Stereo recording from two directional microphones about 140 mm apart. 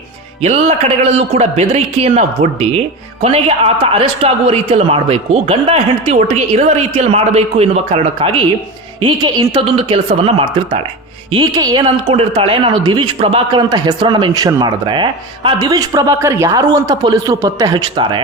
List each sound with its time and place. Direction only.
0.4 s a man's voice: 50° right (ahead or behind)
9.0 s speech: 30° right (ahead or behind)
12.0 s speech: 45° right (ahead or behind); by 17.7 s 25° right (ahead or behind)
17.7 s speech: 35° right (ahead or behind)